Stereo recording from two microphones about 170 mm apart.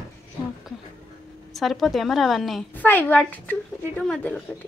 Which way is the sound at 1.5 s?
Centre (ahead or behind).